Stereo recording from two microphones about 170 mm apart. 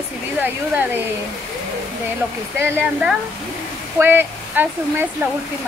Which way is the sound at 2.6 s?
10° right (ahead or behind).